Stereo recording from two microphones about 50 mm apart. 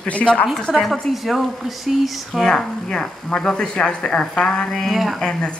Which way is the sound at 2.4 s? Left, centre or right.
Centre.